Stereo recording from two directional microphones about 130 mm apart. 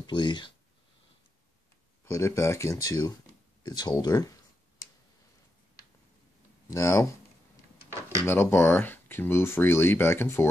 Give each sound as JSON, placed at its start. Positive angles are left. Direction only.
{"t": 0.0, "sound": "speech", "side_deg": 35}
{"t": 2.0, "sound": "speech", "side_deg": 20}
{"t": 6.7, "sound": "speech", "side_deg": 25}
{"t": 8.3, "sound": "speech", "side_deg": 20}